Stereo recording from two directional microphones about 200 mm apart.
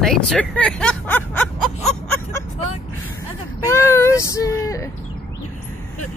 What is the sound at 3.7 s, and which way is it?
Child singing, 15° left (ahead or behind).